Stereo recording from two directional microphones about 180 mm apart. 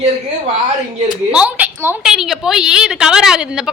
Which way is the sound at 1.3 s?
5° right (ahead or behind).